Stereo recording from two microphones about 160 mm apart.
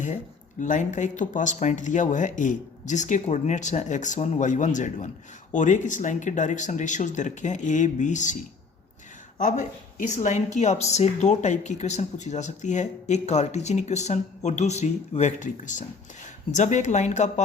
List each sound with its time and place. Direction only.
0.6 s speech: 50° left (ahead or behind)
9.4 s speech: 50° left (ahead or behind)